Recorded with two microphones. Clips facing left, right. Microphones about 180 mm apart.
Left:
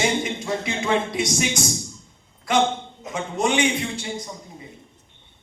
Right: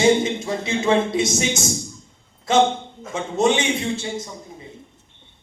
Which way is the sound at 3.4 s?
25° right (ahead or behind).